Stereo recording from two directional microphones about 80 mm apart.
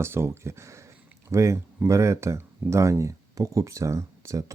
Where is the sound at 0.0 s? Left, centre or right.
Right.